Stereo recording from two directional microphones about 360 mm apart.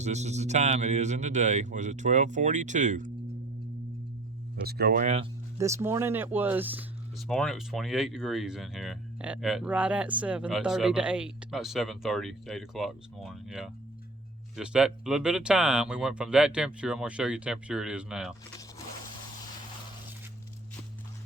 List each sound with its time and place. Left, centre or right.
0.0 s a man's voice: centre
4.6 s speech: right; by 18.3 s centre